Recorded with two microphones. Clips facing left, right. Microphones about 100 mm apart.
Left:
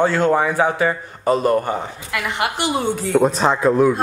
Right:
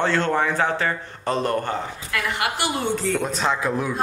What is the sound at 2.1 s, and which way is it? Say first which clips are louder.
Speech: left 3 dB; 20° left (ahead or behind).